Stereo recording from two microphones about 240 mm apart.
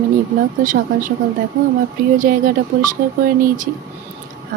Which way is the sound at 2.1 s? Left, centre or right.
Right.